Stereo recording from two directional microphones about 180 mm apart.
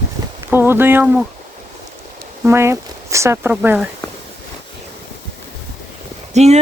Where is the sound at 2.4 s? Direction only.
15° right (ahead or behind).